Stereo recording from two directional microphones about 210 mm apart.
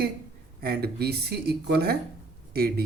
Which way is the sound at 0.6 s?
50° right (ahead or behind).